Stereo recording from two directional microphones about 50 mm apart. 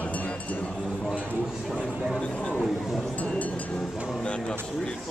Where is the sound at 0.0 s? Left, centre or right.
Left.